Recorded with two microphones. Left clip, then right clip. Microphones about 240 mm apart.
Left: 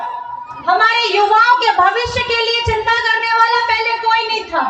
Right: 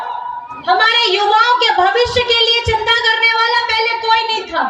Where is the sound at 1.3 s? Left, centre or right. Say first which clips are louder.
Left 1 dB; right.